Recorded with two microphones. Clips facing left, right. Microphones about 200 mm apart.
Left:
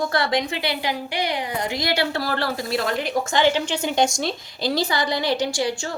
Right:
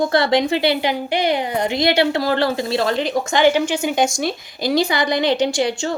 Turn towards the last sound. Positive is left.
turn(degrees=-20)  # may be behind; listen again after turning